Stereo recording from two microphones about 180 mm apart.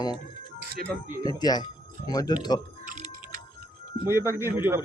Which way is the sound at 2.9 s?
40° right (ahead or behind).